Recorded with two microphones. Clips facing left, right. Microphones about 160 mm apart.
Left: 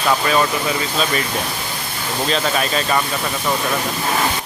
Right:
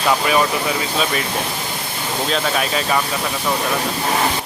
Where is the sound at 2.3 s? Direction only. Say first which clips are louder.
Left 1 dB; centre (ahead or behind).